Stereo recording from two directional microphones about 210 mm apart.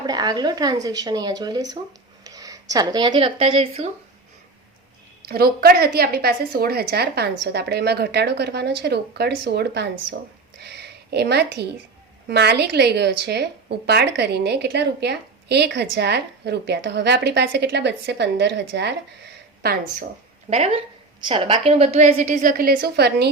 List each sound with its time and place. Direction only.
0.0 s speech: 20° right (ahead or behind)
5.3 s speech: 45° right (ahead or behind)
20.5 s a woman's voice: 30° right (ahead or behind); by 23.3 s 50° right (ahead or behind)